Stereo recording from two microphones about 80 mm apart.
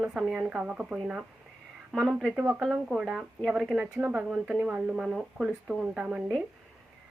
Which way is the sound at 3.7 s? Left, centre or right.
Centre.